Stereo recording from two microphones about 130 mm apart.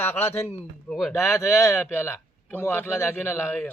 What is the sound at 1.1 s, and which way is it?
Speech, 20° left (ahead or behind).